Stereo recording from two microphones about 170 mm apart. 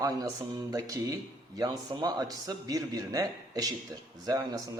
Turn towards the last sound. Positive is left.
turn(degrees=-20)  # may be behind; listen again after turning